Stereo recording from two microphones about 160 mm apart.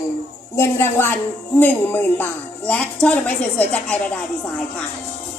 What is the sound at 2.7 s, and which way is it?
A woman's voice, 5° left (ahead or behind).